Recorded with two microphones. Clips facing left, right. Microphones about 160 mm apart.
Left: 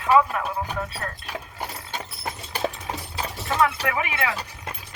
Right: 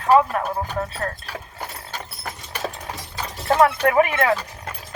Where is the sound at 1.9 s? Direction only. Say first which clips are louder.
Left 1 dB; 25° left (ahead or behind).